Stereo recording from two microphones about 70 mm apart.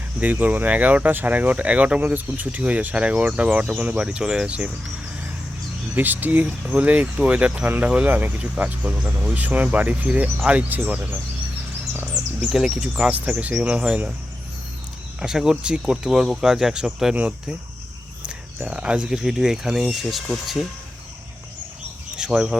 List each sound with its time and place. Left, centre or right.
0.2 s speech: right
5.9 s speech: right
12.5 s speech: centre
13.1 s speech: right
15.2 s speech: centre
18.3 s speech: centre
22.1 s speech: centre